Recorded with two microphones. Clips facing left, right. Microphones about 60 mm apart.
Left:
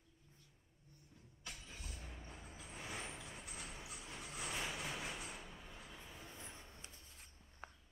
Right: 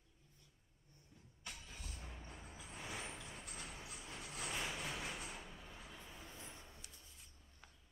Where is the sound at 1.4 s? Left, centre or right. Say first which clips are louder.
Even; centre.